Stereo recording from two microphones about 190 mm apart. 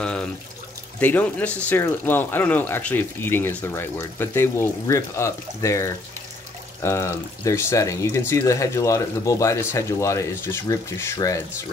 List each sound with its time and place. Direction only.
0.0 s water: 5° left (ahead or behind)
0.9 s speech: 10° left (ahead or behind)